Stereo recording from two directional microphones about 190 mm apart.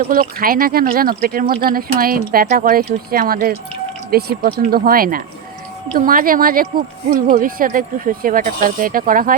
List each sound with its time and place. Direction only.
0.1 s speech: 50° right (ahead or behind)